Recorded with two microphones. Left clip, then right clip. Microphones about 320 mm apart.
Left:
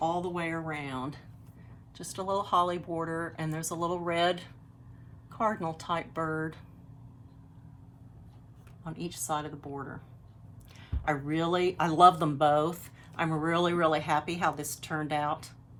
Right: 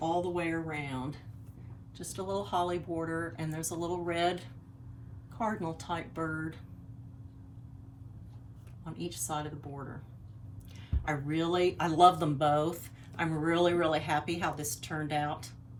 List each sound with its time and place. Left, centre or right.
0.0 s speech: centre
8.8 s speech: centre
10.8 s speech: centre